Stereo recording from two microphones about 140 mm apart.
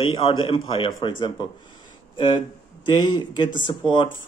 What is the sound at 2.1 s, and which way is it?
Speech, 35° left (ahead or behind).